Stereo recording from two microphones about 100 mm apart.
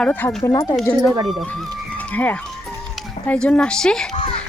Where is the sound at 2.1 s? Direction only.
15° left (ahead or behind).